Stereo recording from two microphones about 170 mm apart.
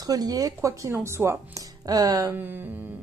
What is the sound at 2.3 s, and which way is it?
Humming, 10° right (ahead or behind).